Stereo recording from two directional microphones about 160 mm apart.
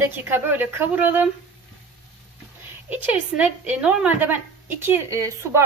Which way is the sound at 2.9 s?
10° right (ahead or behind).